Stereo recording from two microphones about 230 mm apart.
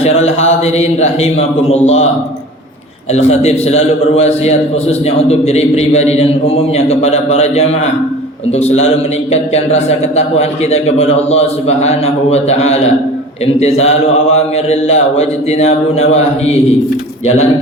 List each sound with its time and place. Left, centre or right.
0.0 s a man's voice: left
3.1 s a man's voice: left